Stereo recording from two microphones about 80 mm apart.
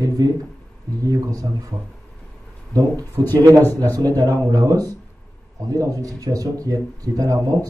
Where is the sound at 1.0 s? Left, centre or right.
Right.